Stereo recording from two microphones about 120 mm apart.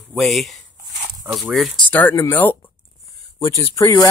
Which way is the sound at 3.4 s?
30° left (ahead or behind).